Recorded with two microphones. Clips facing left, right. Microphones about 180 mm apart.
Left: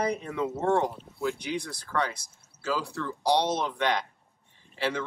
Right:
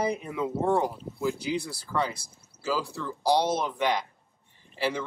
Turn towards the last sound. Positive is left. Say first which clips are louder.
# right 1 dB
turn(degrees=-5)  # may be behind; listen again after turning